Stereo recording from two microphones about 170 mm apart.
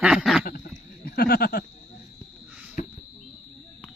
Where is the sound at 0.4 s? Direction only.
60° left (ahead or behind).